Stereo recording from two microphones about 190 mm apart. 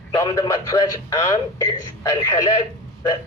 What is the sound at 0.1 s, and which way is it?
A man's voice, 20° left (ahead or behind).